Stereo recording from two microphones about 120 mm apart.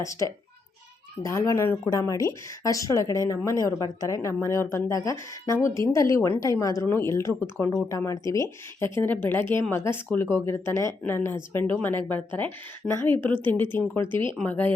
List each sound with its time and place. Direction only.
0.0 s a woman's voice: 25° left (ahead or behind)
13.2 s a woman's voice: 45° right (ahead or behind)
13.5 s a woman's voice: 15° left (ahead or behind)